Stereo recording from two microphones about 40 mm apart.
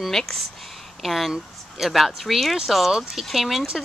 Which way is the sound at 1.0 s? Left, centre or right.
Centre.